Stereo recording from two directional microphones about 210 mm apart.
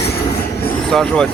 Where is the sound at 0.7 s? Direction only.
5° left (ahead or behind).